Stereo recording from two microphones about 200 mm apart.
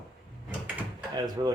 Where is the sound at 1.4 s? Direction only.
20° right (ahead or behind).